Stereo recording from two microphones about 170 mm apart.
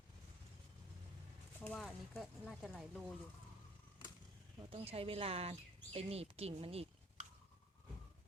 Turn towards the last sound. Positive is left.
turn(degrees=-35)  # may be behind; listen again after turning